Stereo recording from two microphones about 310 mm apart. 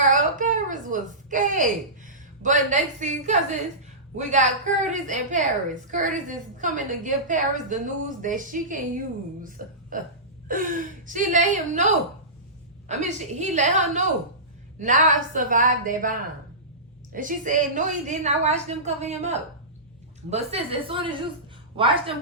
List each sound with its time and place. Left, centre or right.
0.0 s a sound: right
4.2 s a woman's voice: right
12.9 s a woman's voice: right